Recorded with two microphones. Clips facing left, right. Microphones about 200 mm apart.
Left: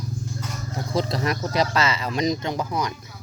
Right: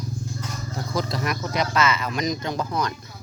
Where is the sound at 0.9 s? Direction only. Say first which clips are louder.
Left 3 dB; 30° left (ahead or behind).